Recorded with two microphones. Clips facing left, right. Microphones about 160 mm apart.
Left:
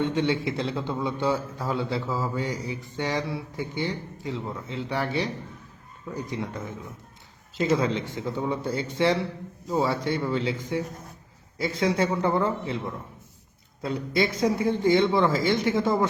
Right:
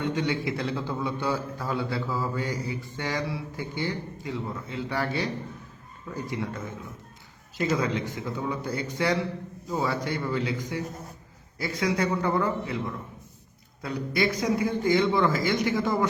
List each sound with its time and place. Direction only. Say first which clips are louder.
0.0 s a man's voice: left 3 dB; 25° left (ahead or behind)
6.3 s a man's voice: even; 20° left (ahead or behind)